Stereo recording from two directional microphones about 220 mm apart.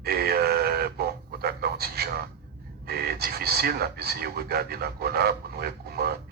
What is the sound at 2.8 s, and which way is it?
A man's voice, 45° right (ahead or behind).